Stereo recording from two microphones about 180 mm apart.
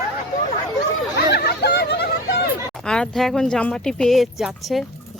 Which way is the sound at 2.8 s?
5° left (ahead or behind).